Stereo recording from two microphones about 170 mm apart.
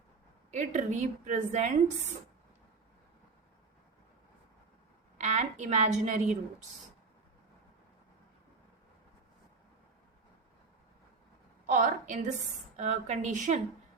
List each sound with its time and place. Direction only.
0.5 s a woman's voice: 45° right (ahead or behind)
5.1 s a woman's voice: 45° right (ahead or behind)
11.6 s a woman's voice: 50° right (ahead or behind)